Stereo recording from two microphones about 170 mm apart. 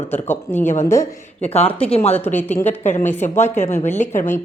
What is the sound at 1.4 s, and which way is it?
Speech, 40° left (ahead or behind).